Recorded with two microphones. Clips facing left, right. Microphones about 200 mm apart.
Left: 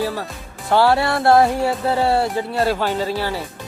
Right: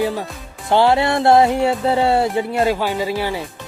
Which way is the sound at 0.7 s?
20° right (ahead or behind).